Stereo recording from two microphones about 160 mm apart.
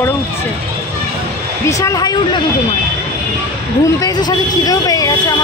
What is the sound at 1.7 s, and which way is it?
Speech, 20° left (ahead or behind).